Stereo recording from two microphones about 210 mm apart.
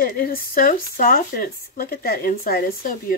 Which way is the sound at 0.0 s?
45° left (ahead or behind).